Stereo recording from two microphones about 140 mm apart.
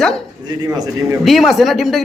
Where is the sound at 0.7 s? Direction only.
25° right (ahead or behind).